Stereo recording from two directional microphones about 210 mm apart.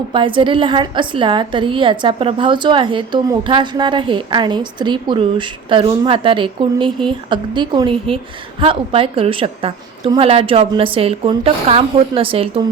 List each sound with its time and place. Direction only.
0.1 s a woman's voice: 25° right (ahead or behind)